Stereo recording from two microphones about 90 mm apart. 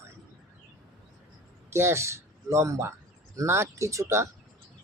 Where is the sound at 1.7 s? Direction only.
30° right (ahead or behind).